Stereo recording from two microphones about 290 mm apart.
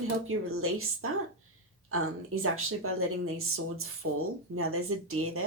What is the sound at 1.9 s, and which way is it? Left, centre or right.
Speech, right.